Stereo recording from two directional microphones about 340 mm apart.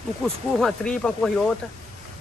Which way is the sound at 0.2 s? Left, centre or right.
Centre.